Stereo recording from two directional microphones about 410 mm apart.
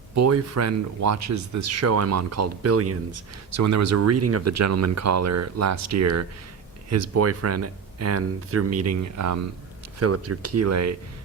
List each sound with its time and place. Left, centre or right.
0.1 s speech: right